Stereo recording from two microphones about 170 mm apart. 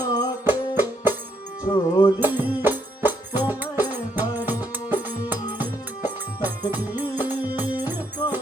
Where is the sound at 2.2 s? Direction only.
10° right (ahead or behind).